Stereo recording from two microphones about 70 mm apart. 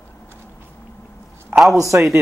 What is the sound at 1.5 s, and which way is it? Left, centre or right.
Speech, centre.